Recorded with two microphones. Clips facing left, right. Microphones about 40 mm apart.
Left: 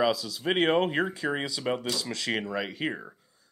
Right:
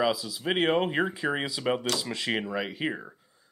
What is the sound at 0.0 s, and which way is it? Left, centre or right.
Speech, centre.